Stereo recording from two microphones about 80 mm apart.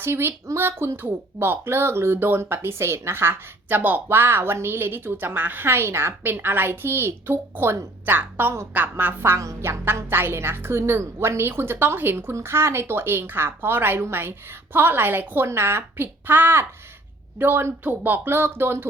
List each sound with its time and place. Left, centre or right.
0.0 s speech: right